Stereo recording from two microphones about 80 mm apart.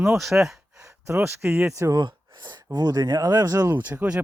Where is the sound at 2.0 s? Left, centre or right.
Right.